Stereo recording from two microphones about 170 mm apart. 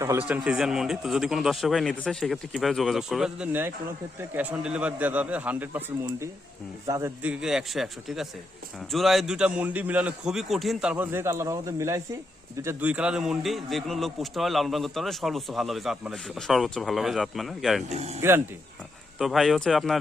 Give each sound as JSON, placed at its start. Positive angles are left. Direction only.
{"t": 0.0, "sound": "speech", "side_deg": -15}
{"t": 0.3, "sound": "a man's voice", "side_deg": -5}
{"t": 7.2, "sound": "a man's voice", "side_deg": -5}
{"t": 10.9, "sound": "a man's voice", "side_deg": -15}
{"t": 17.8, "sound": "speech", "side_deg": -40}
{"t": 18.2, "sound": "a man's voice", "side_deg": -15}
{"t": 19.2, "sound": "a man's voice", "side_deg": 0}